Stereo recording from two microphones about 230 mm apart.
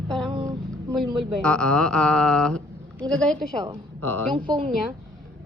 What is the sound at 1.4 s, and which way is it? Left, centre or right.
A woman's voice, centre.